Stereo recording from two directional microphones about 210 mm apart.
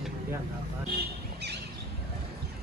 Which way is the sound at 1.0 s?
50° right (ahead or behind).